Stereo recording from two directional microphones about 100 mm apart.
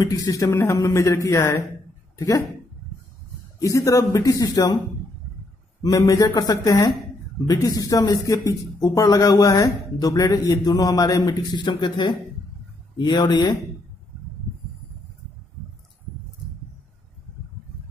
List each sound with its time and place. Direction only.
0.0 s speech: 35° left (ahead or behind)
3.5 s speech: 35° left (ahead or behind)
5.8 s speech: 35° left (ahead or behind)